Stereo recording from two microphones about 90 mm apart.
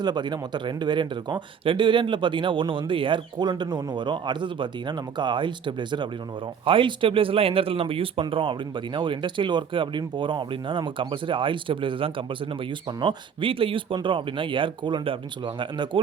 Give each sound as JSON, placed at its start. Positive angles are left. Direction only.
{"t": 0.0, "sound": "speech", "side_deg": -55}
{"t": 6.7, "sound": "speech", "side_deg": -70}